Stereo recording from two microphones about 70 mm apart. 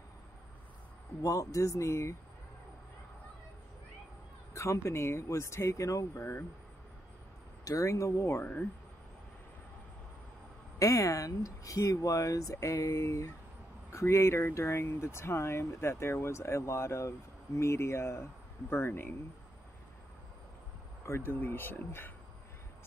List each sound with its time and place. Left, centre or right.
1.2 s speech: left
4.6 s speech: left
6.1 s speech: left
7.6 s speech: left
10.8 s speech: left
21.0 s speech: left